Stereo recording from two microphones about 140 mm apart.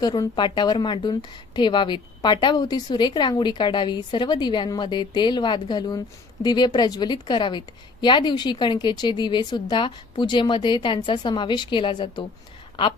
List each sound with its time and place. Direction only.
0.0 s a woman's voice: 30° left (ahead or behind)